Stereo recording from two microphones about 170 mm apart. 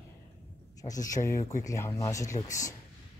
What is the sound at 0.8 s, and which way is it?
Speech, 20° left (ahead or behind).